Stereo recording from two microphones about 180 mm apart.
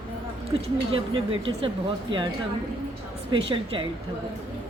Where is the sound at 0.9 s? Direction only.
30° right (ahead or behind).